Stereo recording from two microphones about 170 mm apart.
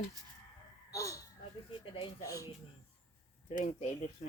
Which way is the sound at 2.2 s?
20° left (ahead or behind).